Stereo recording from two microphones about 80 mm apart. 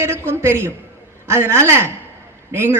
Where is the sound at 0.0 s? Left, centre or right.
Right.